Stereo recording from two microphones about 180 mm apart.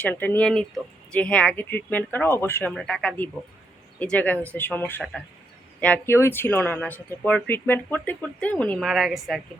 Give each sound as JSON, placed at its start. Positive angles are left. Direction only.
{"t": 0.0, "sound": "speech", "side_deg": 10}